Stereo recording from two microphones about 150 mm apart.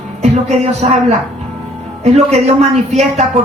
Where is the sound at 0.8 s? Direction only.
50° right (ahead or behind).